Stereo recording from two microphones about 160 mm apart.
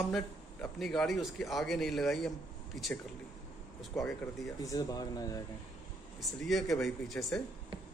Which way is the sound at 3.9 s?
Centre (ahead or behind).